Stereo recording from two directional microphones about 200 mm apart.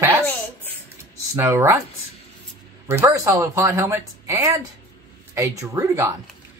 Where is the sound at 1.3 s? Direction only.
10° right (ahead or behind).